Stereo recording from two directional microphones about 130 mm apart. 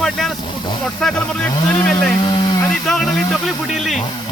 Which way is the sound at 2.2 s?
35° left (ahead or behind).